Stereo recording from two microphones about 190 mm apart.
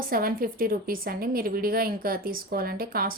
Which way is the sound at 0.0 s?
50° right (ahead or behind).